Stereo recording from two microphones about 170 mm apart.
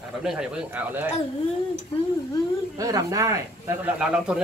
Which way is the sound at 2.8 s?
20° right (ahead or behind).